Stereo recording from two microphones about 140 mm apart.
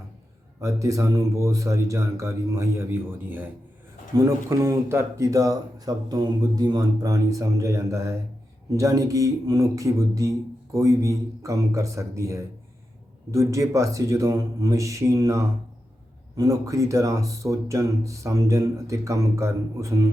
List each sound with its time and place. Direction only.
0.6 s speech: 25° right (ahead or behind)